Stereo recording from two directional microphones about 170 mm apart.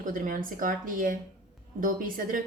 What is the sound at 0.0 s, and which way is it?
A woman's voice, 55° right (ahead or behind).